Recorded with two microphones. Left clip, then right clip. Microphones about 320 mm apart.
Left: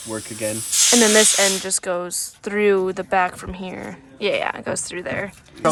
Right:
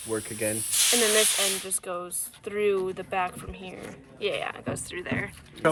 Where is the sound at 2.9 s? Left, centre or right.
Left.